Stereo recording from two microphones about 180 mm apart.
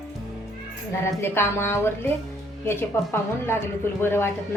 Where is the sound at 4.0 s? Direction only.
15° left (ahead or behind).